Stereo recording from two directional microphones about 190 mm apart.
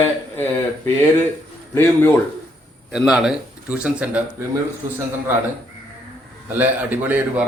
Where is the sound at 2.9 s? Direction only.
5° right (ahead or behind).